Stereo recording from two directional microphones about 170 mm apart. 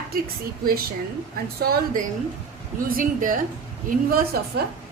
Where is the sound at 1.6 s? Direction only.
60° right (ahead or behind).